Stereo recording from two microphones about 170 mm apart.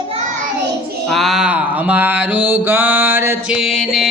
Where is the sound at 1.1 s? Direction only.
Centre (ahead or behind).